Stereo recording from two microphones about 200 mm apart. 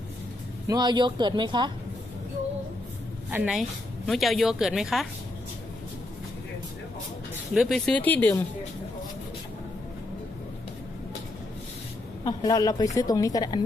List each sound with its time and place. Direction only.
0.7 s speech: 20° right (ahead or behind)
3.3 s speech: 5° right (ahead or behind)
7.5 s speech: centre (ahead or behind)
12.2 s a woman's voice: 20° left (ahead or behind)